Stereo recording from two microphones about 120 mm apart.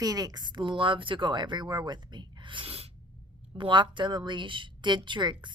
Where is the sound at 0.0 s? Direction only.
30° right (ahead or behind); by 2.9 s 55° right (ahead or behind).